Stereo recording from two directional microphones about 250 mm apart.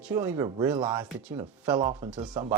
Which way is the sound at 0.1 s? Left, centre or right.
Centre.